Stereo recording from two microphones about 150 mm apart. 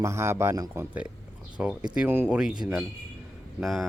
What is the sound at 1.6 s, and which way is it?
Speech, 5° right (ahead or behind).